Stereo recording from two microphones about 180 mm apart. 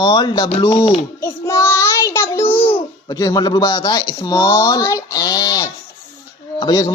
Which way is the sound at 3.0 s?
20° left (ahead or behind).